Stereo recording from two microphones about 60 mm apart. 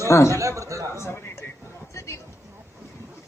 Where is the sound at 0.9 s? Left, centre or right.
Left.